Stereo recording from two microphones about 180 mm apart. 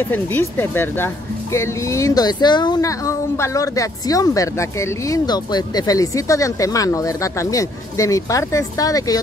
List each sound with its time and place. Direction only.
0.0 s speech: 10° left (ahead or behind)